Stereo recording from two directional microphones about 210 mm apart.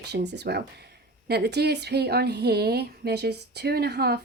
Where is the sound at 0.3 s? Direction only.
50° right (ahead or behind).